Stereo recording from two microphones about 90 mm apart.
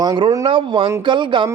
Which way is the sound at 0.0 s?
50° right (ahead or behind).